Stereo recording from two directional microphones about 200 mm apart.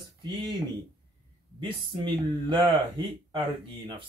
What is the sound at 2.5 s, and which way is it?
Speech, 25° right (ahead or behind).